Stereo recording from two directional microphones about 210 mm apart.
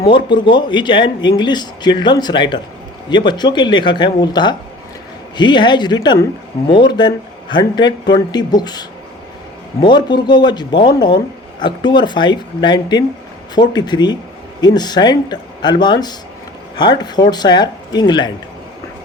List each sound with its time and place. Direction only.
0.1 s speech: 25° left (ahead or behind)